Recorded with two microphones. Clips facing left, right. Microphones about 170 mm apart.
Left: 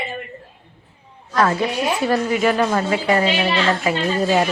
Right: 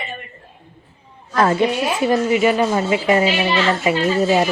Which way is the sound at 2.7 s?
15° right (ahead or behind).